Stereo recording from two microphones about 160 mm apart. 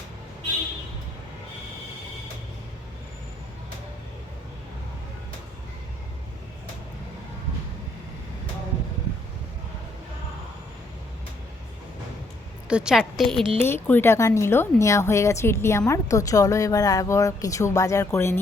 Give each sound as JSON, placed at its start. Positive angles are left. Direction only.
{"t": 12.6, "sound": "a woman's voice", "side_deg": -5}
{"t": 13.6, "sound": "speech", "side_deg": 15}